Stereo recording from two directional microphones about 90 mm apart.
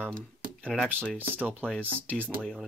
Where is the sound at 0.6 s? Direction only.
10° left (ahead or behind).